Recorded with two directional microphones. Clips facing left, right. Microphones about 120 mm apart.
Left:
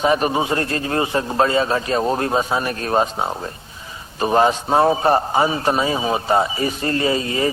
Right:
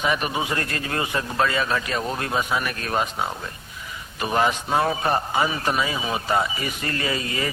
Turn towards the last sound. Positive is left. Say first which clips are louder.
# left 7 dB
turn(degrees=30)  # may be behind; listen again after turning